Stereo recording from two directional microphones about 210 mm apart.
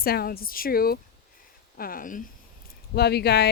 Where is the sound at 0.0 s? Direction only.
45° left (ahead or behind).